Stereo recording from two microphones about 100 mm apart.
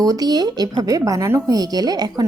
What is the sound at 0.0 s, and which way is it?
A woman's voice, 40° right (ahead or behind).